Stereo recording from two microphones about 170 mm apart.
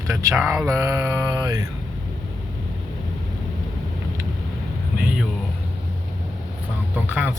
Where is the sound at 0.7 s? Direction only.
15° right (ahead or behind).